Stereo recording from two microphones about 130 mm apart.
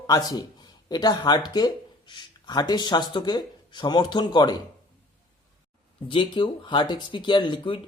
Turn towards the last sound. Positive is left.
turn(degrees=40)  # may be behind; listen again after turning